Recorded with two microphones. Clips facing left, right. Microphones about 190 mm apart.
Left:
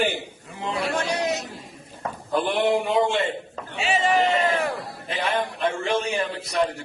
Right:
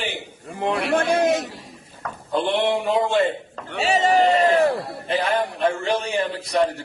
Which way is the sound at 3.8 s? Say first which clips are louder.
Right 4 dB; 40° right (ahead or behind).